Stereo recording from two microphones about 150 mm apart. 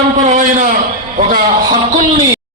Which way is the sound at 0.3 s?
60° right (ahead or behind).